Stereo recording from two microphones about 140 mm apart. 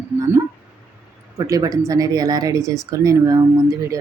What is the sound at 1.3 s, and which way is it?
Speech, 25° right (ahead or behind).